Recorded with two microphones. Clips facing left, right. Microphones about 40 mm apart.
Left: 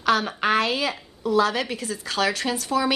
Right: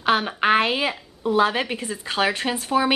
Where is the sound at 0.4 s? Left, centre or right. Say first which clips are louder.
Right 3 dB; right.